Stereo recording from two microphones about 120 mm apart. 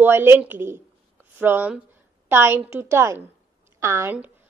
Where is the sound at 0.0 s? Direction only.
20° right (ahead or behind).